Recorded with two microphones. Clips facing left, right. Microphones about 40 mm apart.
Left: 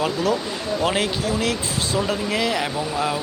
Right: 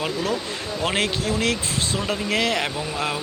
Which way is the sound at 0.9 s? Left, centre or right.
Right.